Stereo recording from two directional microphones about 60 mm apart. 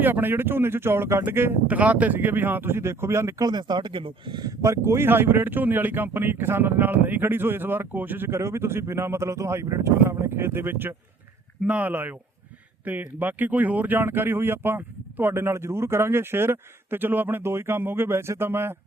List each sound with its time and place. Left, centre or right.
0.0 s speech: right
1.6 s speech: right
4.6 s speech: right
8.3 s speech: right
11.6 s speech: right
17.4 s speech: right